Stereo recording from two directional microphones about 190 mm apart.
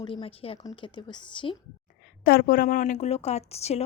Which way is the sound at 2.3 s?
50° left (ahead or behind).